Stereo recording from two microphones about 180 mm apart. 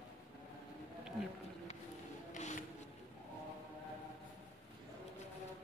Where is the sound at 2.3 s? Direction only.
45° left (ahead or behind).